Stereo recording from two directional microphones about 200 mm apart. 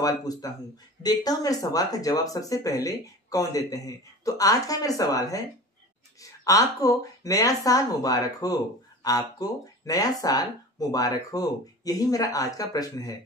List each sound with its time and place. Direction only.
0.0 s speech: 20° left (ahead or behind)
6.4 s speech: 15° left (ahead or behind)